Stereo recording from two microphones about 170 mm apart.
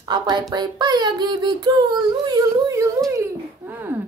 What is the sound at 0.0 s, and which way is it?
Speech, 25° right (ahead or behind).